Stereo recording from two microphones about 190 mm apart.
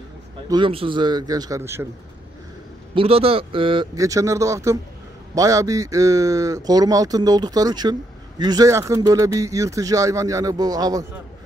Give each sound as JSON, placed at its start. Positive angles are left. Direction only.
{"t": 0.5, "sound": "speech", "side_deg": -25}
{"t": 2.9, "sound": "a man's voice", "side_deg": -30}